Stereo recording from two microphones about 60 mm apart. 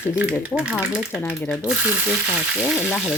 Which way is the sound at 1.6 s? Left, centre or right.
Centre.